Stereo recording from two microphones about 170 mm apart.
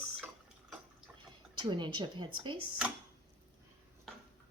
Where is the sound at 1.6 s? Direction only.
25° right (ahead or behind).